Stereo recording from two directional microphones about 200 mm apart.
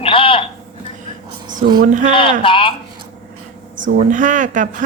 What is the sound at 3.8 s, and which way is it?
Speech, 40° right (ahead or behind).